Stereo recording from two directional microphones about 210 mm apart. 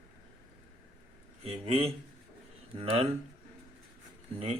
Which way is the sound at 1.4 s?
25° right (ahead or behind).